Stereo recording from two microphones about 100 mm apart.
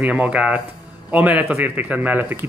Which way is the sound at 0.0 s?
10° right (ahead or behind).